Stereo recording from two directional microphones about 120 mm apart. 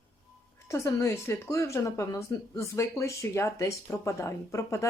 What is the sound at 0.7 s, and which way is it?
Speech, 25° left (ahead or behind).